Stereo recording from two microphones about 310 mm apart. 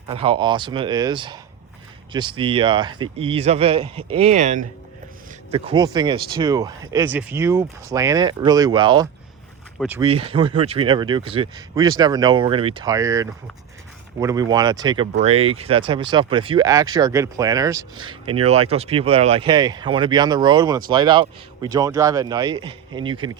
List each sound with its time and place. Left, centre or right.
0.1 s speech: centre
9.7 s speech: centre
10.0 s speech: centre